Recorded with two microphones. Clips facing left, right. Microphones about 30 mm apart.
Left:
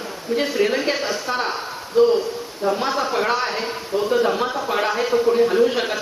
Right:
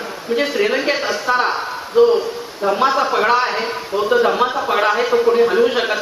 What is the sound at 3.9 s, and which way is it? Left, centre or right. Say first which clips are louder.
A man's voice: right 4 dB; right.